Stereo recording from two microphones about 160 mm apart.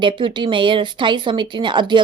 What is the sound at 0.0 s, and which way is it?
Speech, 30° right (ahead or behind).